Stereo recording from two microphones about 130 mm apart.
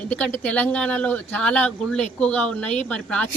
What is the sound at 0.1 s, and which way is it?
A woman's voice, 10° left (ahead or behind).